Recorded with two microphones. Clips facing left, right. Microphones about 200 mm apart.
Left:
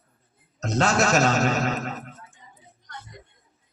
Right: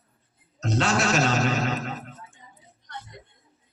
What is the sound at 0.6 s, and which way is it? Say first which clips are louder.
Speech: left 2 dB; 40° left (ahead or behind).